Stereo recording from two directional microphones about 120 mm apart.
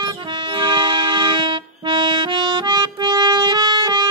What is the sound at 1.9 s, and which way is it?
Music, 40° right (ahead or behind).